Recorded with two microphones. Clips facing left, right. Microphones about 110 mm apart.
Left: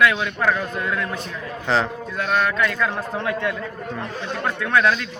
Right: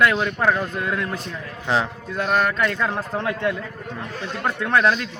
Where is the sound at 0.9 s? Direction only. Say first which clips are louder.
Even; 35° right (ahead or behind).